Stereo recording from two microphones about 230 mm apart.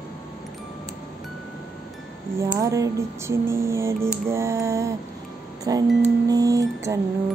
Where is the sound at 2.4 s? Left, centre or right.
Centre.